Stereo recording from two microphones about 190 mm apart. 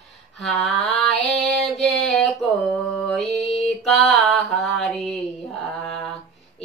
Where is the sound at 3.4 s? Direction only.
35° left (ahead or behind).